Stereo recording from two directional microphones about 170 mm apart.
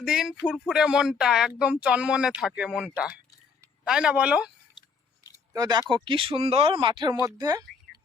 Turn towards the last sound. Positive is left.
turn(degrees=-20)  # may be behind; listen again after turning